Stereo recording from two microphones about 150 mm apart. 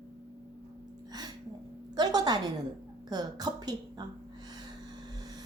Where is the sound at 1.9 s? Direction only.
25° right (ahead or behind).